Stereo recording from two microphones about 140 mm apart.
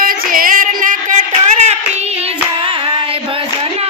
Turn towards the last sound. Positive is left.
turn(degrees=-40)  # may be behind; listen again after turning